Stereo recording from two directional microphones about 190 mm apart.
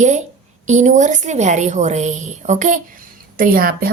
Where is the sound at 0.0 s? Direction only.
40° right (ahead or behind).